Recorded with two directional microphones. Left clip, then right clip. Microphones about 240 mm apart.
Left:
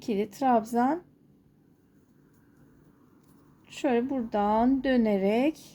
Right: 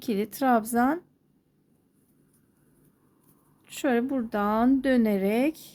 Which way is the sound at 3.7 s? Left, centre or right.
Right.